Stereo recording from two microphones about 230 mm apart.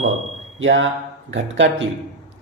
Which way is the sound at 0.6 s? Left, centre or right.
Right.